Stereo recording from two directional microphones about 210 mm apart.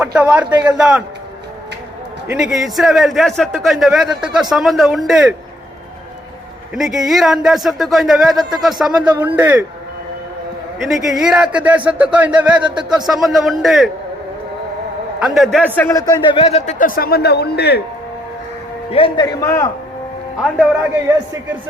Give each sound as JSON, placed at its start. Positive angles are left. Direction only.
{"t": 0.0, "sound": "a man's voice", "side_deg": -5}
{"t": 2.3, "sound": "a man's voice", "side_deg": 0}
{"t": 6.7, "sound": "a man's voice", "side_deg": 0}
{"t": 10.8, "sound": "a man's voice", "side_deg": 0}
{"t": 15.2, "sound": "a man's voice", "side_deg": 0}
{"t": 18.9, "sound": "a man's voice", "side_deg": 25}